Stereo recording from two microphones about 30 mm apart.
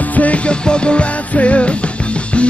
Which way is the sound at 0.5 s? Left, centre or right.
Left.